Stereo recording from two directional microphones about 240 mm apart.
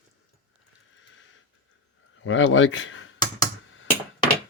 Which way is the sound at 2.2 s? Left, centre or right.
Left.